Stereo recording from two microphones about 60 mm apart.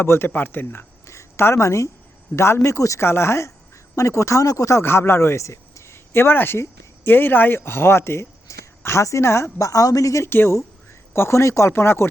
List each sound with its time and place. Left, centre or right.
0.0 s speech: left
3.0 s speech: left
4.8 s speech: left
10.2 s speech: left
11.7 s speech: left